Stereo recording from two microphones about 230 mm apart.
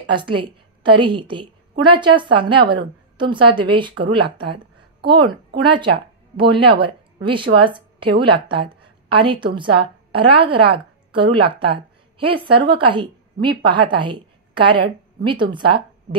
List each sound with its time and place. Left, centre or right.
0.1 s a woman's voice: right